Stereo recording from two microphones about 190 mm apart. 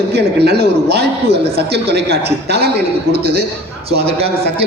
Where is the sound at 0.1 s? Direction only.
60° right (ahead or behind).